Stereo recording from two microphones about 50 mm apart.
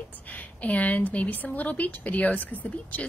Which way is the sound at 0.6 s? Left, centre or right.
Left.